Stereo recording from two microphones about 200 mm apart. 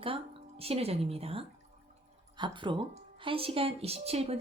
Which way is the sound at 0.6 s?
30° right (ahead or behind).